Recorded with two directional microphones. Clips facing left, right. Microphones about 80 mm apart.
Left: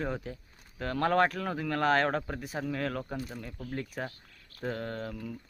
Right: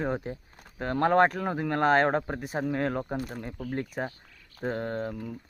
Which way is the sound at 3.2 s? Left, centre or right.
Right.